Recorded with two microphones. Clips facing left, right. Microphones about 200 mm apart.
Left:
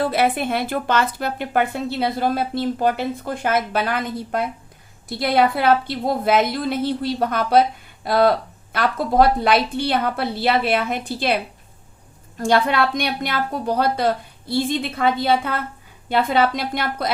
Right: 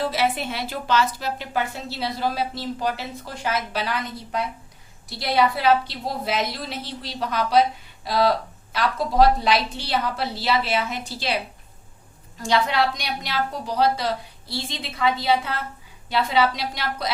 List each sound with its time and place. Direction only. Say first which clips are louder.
0.0 s a woman's voice: left 4 dB; 55° left (ahead or behind)
12.4 s a woman's voice: left 3 dB; 55° left (ahead or behind)